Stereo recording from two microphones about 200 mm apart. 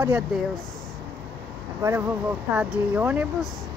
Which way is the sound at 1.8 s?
15° right (ahead or behind).